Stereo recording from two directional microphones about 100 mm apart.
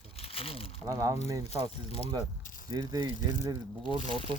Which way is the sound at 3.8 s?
60° right (ahead or behind).